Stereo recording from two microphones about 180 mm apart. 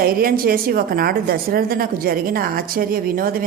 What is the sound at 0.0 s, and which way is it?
A woman's voice, 55° right (ahead or behind).